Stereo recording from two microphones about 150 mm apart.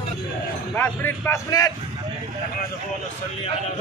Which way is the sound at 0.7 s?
10° left (ahead or behind).